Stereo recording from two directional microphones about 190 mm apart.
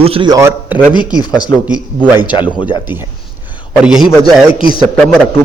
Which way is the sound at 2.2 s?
25° left (ahead or behind).